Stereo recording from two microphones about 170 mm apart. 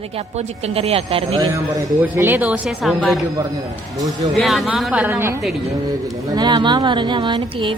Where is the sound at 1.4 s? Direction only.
15° right (ahead or behind); by 3.3 s centre (ahead or behind).